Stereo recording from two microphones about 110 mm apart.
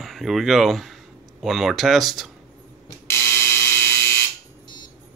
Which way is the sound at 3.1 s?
20° left (ahead or behind).